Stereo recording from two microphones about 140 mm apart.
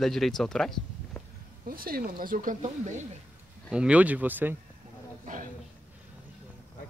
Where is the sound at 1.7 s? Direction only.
90° right.